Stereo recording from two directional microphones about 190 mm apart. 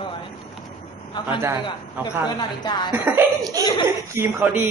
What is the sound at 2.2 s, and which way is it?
Speech, 20° left (ahead or behind).